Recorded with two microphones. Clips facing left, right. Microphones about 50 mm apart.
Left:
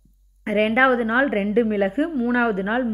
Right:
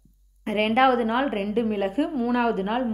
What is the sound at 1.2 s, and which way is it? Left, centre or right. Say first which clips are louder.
A woman's voice: left 5 dB; left.